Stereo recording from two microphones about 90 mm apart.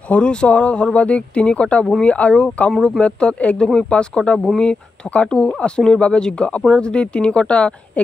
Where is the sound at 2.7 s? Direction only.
Centre (ahead or behind).